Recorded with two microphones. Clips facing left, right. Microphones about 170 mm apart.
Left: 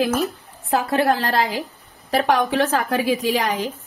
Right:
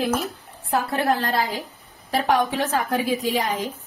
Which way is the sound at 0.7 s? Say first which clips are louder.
Left 3 dB; 90° left.